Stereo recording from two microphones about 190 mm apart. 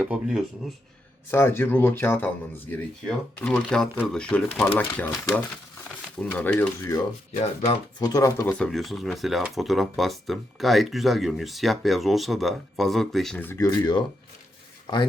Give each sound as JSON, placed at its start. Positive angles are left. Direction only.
{"t": 0.0, "sound": "speech", "side_deg": -5}
{"t": 1.3, "sound": "speech", "side_deg": 10}
{"t": 8.5, "sound": "speech", "side_deg": 0}